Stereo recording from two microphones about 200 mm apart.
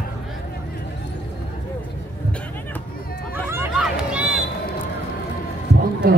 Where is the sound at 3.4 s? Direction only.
10° right (ahead or behind).